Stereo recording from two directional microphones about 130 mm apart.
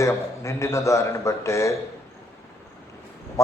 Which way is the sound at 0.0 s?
25° left (ahead or behind).